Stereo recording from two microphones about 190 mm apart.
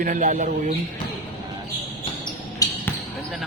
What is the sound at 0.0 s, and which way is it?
Speech, 45° right (ahead or behind).